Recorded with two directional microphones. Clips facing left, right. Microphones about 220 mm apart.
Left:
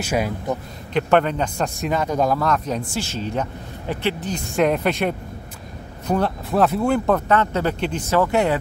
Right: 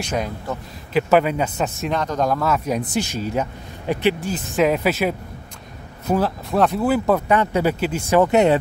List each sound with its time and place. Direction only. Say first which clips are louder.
0.0 s speech: left 2 dB; 10° left (ahead or behind)
0.9 s a man's voice: right 1 dB; 5° right (ahead or behind)
4.5 s a man's voice: right 1 dB; centre (ahead or behind)
8.2 s speech: right 4 dB; 20° right (ahead or behind)